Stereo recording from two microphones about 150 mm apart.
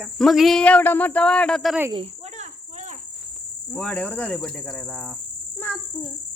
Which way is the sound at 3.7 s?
10° left (ahead or behind).